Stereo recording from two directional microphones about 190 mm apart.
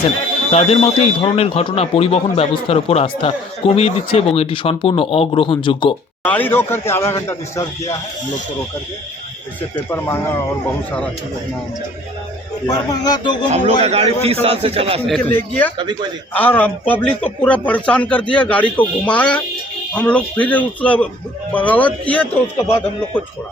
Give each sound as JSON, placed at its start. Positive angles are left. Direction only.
{"t": 0.5, "sound": "speech", "side_deg": 30}
{"t": 6.2, "sound": "a man's voice", "side_deg": 10}
{"t": 9.9, "sound": "a man's voice", "side_deg": 10}
{"t": 12.6, "sound": "speech", "side_deg": 20}
{"t": 13.5, "sound": "a man's voice", "side_deg": -35}
{"t": 15.4, "sound": "a man's voice", "side_deg": 10}
{"t": 15.8, "sound": "a man's voice", "side_deg": -20}
{"t": 16.3, "sound": "a man's voice", "side_deg": 10}